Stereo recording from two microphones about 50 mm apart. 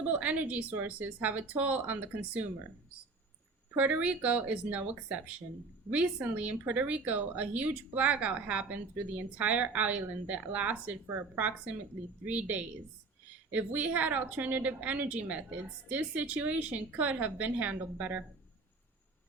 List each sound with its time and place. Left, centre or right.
0.0 s speech: right
3.8 s a woman's voice: right